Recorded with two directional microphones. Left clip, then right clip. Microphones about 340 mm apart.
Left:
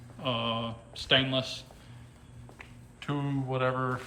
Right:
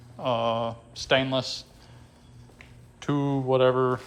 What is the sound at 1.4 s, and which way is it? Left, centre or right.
Speech, right.